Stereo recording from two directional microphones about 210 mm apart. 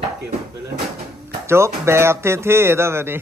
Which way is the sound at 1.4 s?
10° right (ahead or behind).